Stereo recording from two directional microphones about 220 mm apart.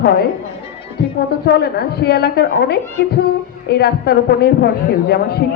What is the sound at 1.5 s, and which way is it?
A man's voice, 45° left (ahead or behind).